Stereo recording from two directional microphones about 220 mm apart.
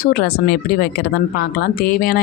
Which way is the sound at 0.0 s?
45° left (ahead or behind).